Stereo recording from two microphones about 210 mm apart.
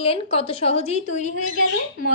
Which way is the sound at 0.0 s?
30° left (ahead or behind).